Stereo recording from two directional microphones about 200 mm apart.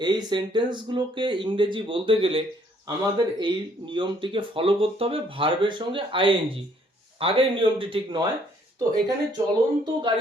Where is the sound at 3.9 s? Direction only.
25° right (ahead or behind).